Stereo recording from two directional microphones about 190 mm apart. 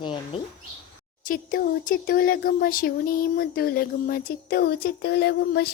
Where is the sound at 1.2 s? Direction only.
45° left (ahead or behind).